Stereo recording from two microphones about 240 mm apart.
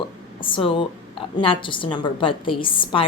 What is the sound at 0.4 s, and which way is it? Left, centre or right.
A woman's voice, left.